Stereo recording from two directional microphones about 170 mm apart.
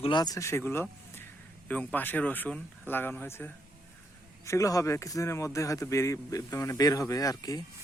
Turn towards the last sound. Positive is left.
turn(degrees=20)  # may be behind; listen again after turning